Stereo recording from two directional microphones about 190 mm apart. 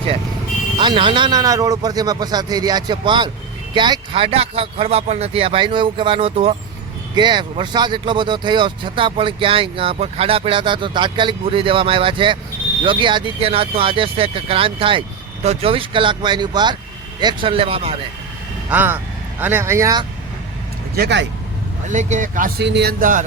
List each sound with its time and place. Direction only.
0.8 s speech: 25° right (ahead or behind)
18.7 s speech: 10° right (ahead or behind)
20.9 s speech: 60° right (ahead or behind)
21.8 s speech: 40° right (ahead or behind)